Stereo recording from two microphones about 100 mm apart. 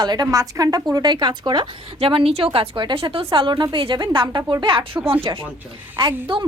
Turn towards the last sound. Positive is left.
turn(degrees=-50)  # may be behind; listen again after turning